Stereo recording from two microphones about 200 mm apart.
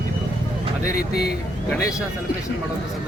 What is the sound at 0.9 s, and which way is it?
Speech, 50° left (ahead or behind).